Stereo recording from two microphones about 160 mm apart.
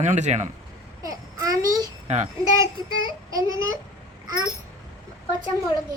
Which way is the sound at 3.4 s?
20° right (ahead or behind).